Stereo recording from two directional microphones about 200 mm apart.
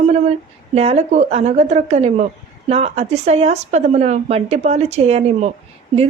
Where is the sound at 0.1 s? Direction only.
30° right (ahead or behind).